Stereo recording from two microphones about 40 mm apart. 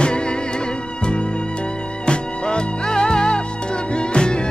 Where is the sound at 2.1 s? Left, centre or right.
Left.